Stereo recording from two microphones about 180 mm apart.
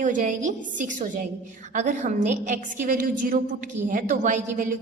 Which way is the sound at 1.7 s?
45° right (ahead or behind).